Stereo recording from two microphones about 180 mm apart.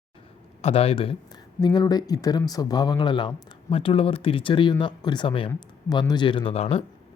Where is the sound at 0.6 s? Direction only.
35° left (ahead or behind).